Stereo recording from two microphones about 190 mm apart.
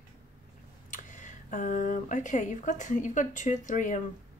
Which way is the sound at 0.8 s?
45° left (ahead or behind).